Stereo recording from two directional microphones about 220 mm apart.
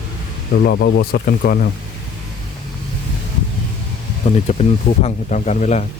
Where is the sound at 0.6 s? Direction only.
50° left (ahead or behind).